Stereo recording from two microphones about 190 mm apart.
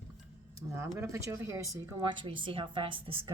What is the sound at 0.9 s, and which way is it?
A woman's voice, 15° right (ahead or behind).